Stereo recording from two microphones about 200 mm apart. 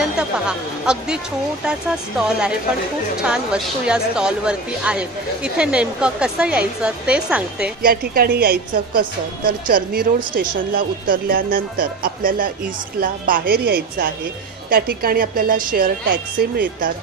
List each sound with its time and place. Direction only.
0.0 s speech: 5° right (ahead or behind)
3.8 s speech: 5° right (ahead or behind)
7.8 s speech: 50° right (ahead or behind)